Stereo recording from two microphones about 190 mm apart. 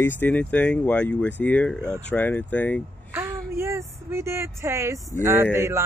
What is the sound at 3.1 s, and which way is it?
Speech, 15° right (ahead or behind).